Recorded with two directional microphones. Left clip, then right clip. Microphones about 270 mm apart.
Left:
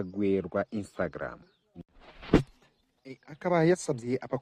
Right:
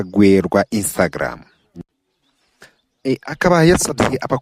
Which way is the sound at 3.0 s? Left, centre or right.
Right.